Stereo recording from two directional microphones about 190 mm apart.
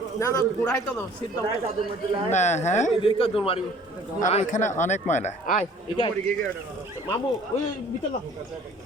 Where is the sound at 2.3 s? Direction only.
40° left (ahead or behind).